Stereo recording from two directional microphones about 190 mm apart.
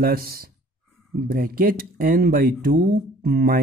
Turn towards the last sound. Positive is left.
turn(degrees=-50)  # may be behind; listen again after turning